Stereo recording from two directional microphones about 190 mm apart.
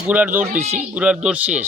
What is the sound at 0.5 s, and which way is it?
Speech, 40° right (ahead or behind).